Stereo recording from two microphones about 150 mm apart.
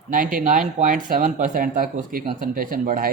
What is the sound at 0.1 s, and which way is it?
A man's voice, 65° right (ahead or behind).